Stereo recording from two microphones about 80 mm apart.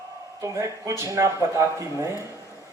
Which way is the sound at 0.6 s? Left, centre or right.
Right.